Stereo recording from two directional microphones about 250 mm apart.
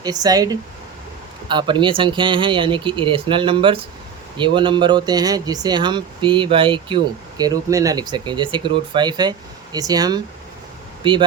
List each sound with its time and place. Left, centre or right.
0.0 s speech: centre